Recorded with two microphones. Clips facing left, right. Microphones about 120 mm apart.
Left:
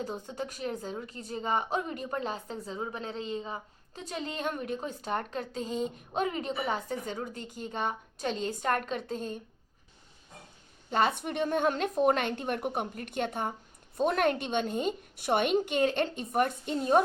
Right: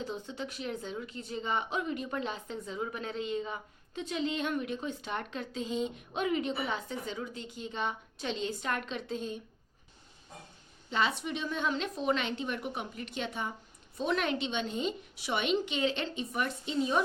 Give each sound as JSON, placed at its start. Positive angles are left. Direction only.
{"t": 0.3, "sound": "a woman's voice", "side_deg": 40}
{"t": 10.8, "sound": "a woman's voice", "side_deg": 50}